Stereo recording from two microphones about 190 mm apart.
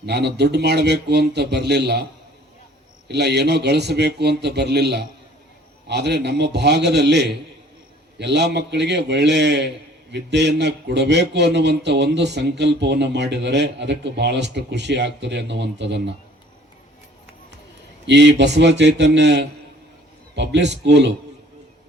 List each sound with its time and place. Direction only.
0.0 s a man's voice: 60° right (ahead or behind)
3.1 s a man's voice: 60° right (ahead or behind)
18.0 s a man's voice: 65° right (ahead or behind)